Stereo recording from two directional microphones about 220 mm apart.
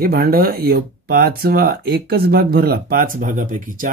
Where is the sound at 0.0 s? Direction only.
45° right (ahead or behind).